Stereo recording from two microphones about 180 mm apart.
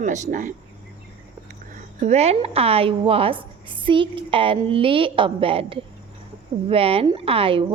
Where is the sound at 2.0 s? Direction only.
35° right (ahead or behind).